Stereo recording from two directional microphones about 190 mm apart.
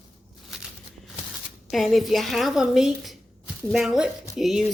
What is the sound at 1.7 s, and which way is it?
Speech, centre (ahead or behind).